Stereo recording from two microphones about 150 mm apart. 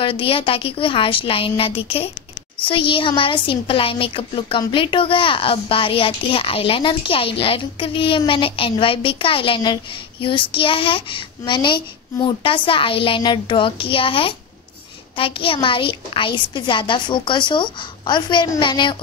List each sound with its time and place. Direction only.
0.0 s a woman's voice: 35° left (ahead or behind)